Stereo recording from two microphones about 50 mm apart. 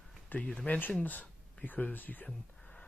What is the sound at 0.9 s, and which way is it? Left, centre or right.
Speech, left.